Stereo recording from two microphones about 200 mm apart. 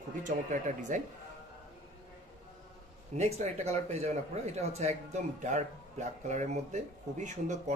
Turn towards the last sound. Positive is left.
turn(degrees=-35)  # may be behind; listen again after turning